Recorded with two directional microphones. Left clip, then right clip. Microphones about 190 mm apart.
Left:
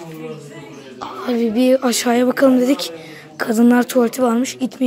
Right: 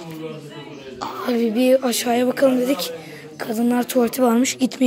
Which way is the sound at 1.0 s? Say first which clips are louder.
Left 1 dB; centre (ahead or behind).